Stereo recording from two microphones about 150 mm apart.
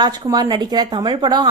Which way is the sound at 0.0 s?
25° right (ahead or behind).